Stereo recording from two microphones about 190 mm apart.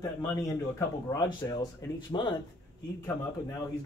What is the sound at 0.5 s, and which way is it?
Speech, 15° left (ahead or behind).